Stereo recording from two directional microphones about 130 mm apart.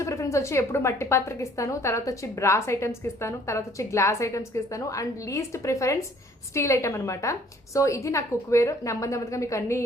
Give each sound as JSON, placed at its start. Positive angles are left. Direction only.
{"t": 0.0, "sound": "a woman's voice", "side_deg": 25}